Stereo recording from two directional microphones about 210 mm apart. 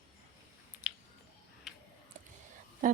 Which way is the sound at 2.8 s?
40° right (ahead or behind).